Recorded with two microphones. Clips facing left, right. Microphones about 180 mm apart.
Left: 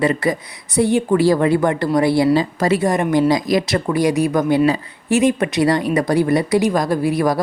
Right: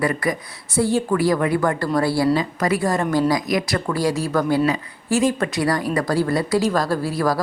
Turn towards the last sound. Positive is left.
turn(degrees=20)  # may be behind; listen again after turning